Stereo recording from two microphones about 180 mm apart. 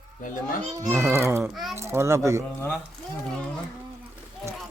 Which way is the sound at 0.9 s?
15° right (ahead or behind).